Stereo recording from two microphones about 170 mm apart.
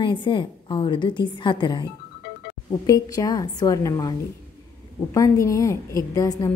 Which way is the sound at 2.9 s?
20° left (ahead or behind).